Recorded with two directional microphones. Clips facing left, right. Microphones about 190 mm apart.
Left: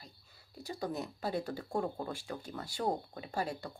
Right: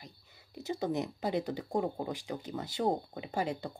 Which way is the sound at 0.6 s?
20° right (ahead or behind).